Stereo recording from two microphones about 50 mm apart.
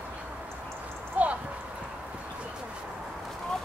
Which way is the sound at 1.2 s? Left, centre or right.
Right.